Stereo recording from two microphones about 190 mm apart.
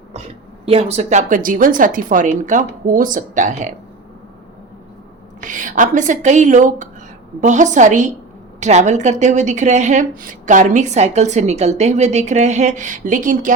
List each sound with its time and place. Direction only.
0.6 s a woman's voice: 30° right (ahead or behind)
5.4 s a woman's voice: 40° right (ahead or behind)